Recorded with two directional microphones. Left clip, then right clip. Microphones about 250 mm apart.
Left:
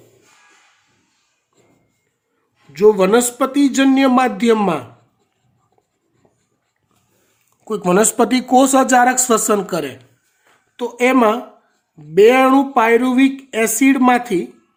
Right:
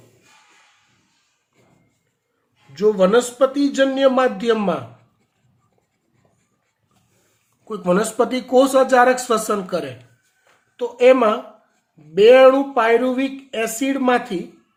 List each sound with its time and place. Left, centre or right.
2.7 s speech: left
7.7 s speech: left